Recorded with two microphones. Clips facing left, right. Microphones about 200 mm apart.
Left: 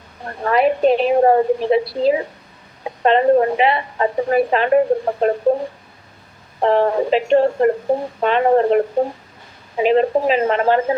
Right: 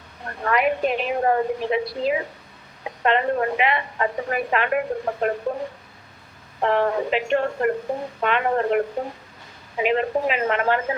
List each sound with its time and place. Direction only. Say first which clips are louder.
0.3 s a woman's voice: left 5 dB; 30° left (ahead or behind)
6.6 s a woman's voice: left 5 dB; 30° left (ahead or behind)